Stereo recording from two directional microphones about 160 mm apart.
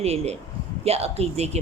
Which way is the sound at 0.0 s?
40° right (ahead or behind).